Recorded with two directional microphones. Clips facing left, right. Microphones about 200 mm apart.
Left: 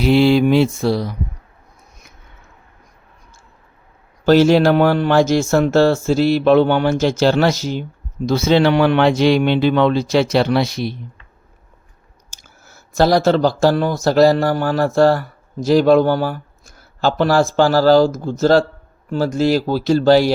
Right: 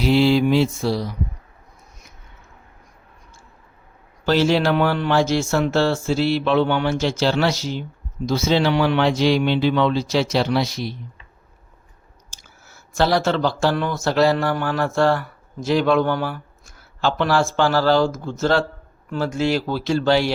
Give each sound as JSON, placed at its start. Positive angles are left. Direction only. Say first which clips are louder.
{"t": 0.0, "sound": "speech", "louder": "left 4 dB", "side_deg": 60}
{"t": 4.3, "sound": "speech", "louder": "left 6 dB", "side_deg": 45}
{"t": 8.3, "sound": "speech", "louder": "left 5 dB", "side_deg": 60}
{"t": 12.3, "sound": "speech", "louder": "left 3 dB", "side_deg": 45}